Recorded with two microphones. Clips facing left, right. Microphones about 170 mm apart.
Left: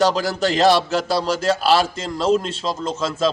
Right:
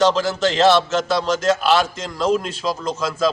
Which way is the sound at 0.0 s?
40° left (ahead or behind).